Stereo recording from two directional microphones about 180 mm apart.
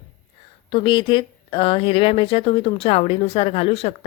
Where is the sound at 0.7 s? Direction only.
25° left (ahead or behind).